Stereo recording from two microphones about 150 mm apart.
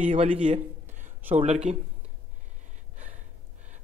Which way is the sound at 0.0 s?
40° right (ahead or behind).